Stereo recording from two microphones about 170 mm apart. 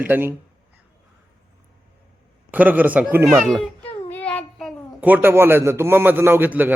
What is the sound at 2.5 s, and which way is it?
Speech, 10° right (ahead or behind).